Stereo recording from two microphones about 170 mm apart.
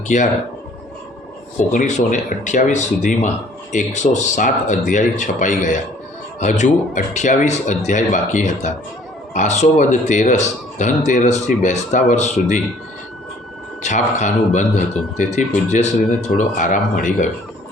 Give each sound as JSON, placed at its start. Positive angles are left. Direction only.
{"t": 0.1, "sound": "speech", "side_deg": 45}
{"t": 1.7, "sound": "speech", "side_deg": 50}
{"t": 13.8, "sound": "speech", "side_deg": 45}